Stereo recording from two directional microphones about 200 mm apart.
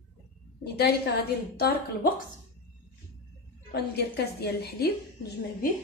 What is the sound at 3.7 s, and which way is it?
A woman's voice, 55° left (ahead or behind).